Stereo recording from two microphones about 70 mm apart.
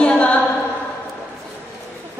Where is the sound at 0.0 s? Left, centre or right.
Centre.